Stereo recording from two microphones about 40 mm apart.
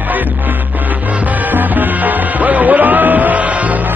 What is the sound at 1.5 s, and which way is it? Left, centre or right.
Music, right.